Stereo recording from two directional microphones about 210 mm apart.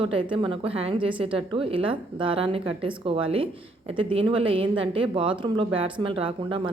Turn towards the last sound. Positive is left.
turn(degrees=-25)  # may be behind; listen again after turning